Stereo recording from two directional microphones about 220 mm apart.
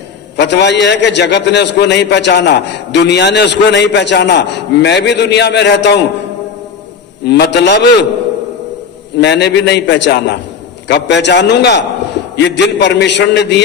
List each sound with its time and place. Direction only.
0.4 s a man's voice: 50° left (ahead or behind)
7.2 s a man's voice: 50° left (ahead or behind)
9.2 s a man's voice: 50° left (ahead or behind)